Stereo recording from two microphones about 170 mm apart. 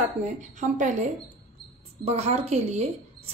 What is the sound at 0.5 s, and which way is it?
A woman's voice, 45° right (ahead or behind).